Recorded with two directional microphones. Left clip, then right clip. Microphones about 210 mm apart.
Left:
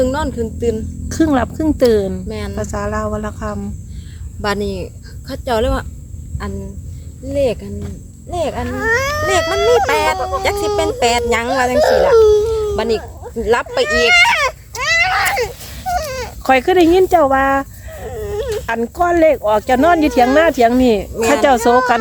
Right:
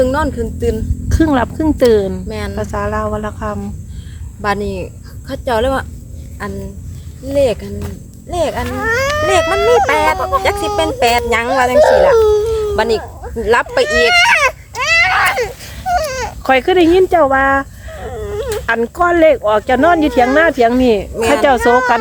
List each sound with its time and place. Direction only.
0.0 s speech: 10° left (ahead or behind)
4.4 s speech: 15° left (ahead or behind)
7.3 s speech: centre (ahead or behind)
8.7 s speech: 25° left (ahead or behind)
9.7 s speech: 10° left (ahead or behind)
11.8 s speech: 30° left (ahead or behind)
12.7 s speech: centre (ahead or behind)
13.0 s speech: 10° left (ahead or behind)
14.0 s a sound: 10° left (ahead or behind)
16.4 s speech: 15° left (ahead or behind)